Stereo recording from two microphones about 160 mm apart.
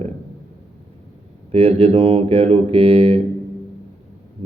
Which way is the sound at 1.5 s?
35° right (ahead or behind).